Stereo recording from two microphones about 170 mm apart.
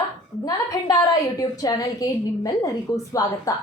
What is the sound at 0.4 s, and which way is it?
A woman's voice, 20° left (ahead or behind).